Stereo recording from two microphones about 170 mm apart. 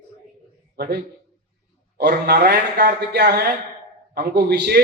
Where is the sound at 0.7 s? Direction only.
75° right (ahead or behind).